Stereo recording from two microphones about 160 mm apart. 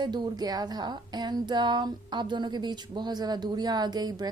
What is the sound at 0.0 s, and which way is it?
Speech, 25° right (ahead or behind).